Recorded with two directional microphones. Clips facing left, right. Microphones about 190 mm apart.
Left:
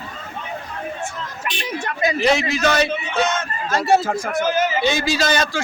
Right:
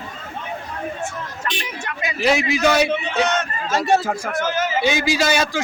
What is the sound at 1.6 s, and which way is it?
Speech, 40° left (ahead or behind).